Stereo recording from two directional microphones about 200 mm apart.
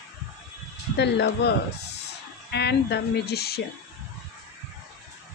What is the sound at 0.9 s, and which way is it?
Speech, 60° left (ahead or behind).